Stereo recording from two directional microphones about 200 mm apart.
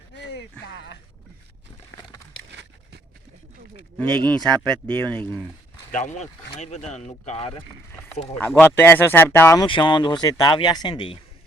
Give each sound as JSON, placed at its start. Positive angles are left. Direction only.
{"t": 0.2, "sound": "a sound", "side_deg": 60}
{"t": 2.5, "sound": "a sound", "side_deg": -60}
{"t": 3.9, "sound": "speech", "side_deg": 5}
{"t": 5.9, "sound": "speech", "side_deg": 35}
{"t": 8.4, "sound": "speech", "side_deg": 10}
{"t": 9.6, "sound": "speech", "side_deg": 25}